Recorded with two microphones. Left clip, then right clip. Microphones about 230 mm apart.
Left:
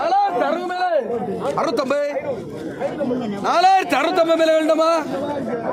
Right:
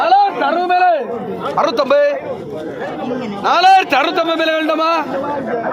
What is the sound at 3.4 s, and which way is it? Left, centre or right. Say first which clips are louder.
A man's voice: right 5 dB; left.